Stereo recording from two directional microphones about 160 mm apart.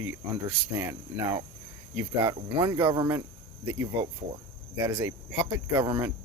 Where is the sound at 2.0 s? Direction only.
20° right (ahead or behind).